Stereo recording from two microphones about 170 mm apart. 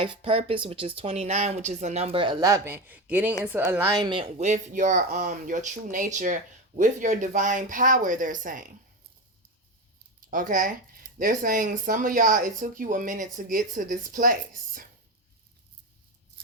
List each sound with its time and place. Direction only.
0.0 s speech: 30° right (ahead or behind)
2.4 s speech: 15° right (ahead or behind)
4.0 s speech: 30° right (ahead or behind)
4.4 s speech: 45° right (ahead or behind)
10.5 s speech: 50° right (ahead or behind)